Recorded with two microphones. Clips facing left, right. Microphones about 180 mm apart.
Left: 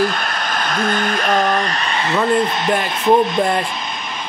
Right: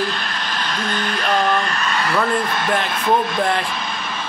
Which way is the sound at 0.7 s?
50° left (ahead or behind).